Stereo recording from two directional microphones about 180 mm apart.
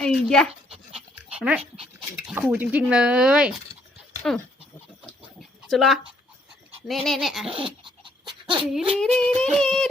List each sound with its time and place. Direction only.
0.0 s dog: 5° left (ahead or behind)
2.2 s speech: 5° right (ahead or behind)
5.4 s a sound: centre (ahead or behind)
6.8 s speech: centre (ahead or behind)
7.4 s a sound: 30° right (ahead or behind)
8.3 s dog: 25° right (ahead or behind)
8.6 s speech: 5° right (ahead or behind)